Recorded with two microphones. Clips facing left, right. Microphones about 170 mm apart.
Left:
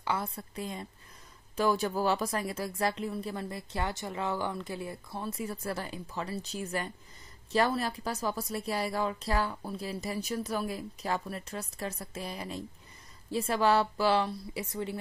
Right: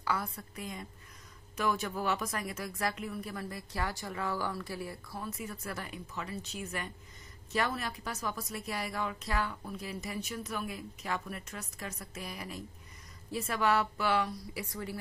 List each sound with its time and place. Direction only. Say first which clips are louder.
0.0 s a woman's voice: left 2 dB; 25° left (ahead or behind)